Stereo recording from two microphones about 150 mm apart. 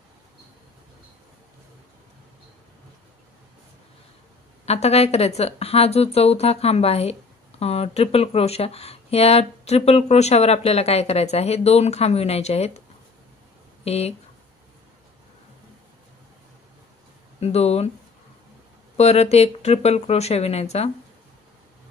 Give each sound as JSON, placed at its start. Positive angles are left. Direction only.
{"t": 4.6, "sound": "speech", "side_deg": 45}
{"t": 13.8, "sound": "speech", "side_deg": 45}
{"t": 17.4, "sound": "speech", "side_deg": 45}
{"t": 18.9, "sound": "speech", "side_deg": 45}